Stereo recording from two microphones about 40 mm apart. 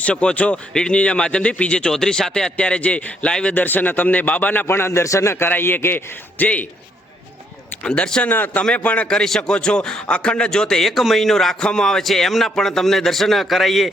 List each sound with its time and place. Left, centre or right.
0.0 s a man's voice: left
0.7 s a man's voice: centre
0.9 s a man's voice: left
1.9 s speech: centre
2.6 s a man's voice: left
3.5 s a man's voice: left
4.6 s a man's voice: left
5.3 s a man's voice: left
6.4 s a man's voice: left
7.9 s a man's voice: left
8.7 s a man's voice: left
9.5 s a man's voice: left; by 11.5 s centre
11.6 s a man's voice: centre
12.0 s a man's voice: centre